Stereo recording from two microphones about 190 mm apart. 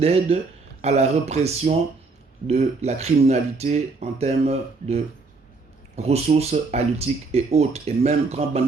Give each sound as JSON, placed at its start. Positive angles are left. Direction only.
{"t": 0.0, "sound": "speech", "side_deg": -30}
{"t": 6.0, "sound": "speech", "side_deg": -35}